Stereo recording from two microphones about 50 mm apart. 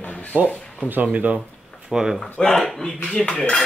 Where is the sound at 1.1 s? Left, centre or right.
Right.